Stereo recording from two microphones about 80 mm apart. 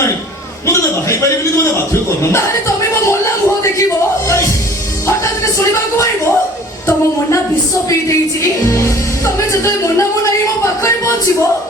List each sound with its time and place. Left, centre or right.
0.7 s a man's voice: left
3.1 s a sound: left
9.2 s music: left
10.6 s speech: left